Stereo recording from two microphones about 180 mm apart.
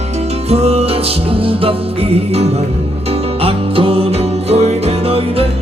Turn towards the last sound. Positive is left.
turn(degrees=-35)  # may be behind; listen again after turning